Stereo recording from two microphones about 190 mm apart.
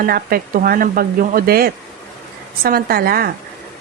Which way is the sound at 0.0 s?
50° right (ahead or behind).